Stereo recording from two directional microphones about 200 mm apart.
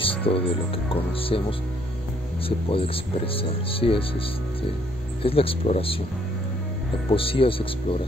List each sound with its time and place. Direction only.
0.0 s music: 25° left (ahead or behind)
0.9 s speech: 30° left (ahead or behind)
2.4 s speech: 25° left (ahead or behind)
5.2 s speech: 30° left (ahead or behind)
7.1 s speech: 25° left (ahead or behind)